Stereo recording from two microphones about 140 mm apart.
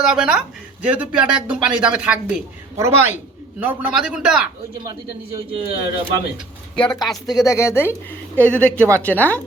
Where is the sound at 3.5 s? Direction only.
10° right (ahead or behind).